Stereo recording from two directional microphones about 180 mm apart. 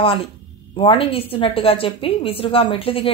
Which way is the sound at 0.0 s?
30° left (ahead or behind).